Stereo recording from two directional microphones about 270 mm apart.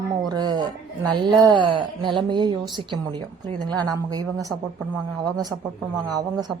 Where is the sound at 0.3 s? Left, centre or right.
Centre.